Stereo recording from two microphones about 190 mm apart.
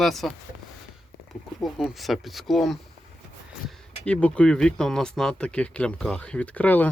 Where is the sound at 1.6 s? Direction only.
Centre (ahead or behind).